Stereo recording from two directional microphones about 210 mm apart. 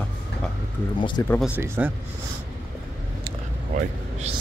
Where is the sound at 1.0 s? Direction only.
25° left (ahead or behind).